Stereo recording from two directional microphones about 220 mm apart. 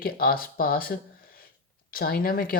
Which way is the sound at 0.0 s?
40° left (ahead or behind).